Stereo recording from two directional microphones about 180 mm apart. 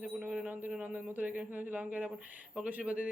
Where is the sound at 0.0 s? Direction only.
5° right (ahead or behind).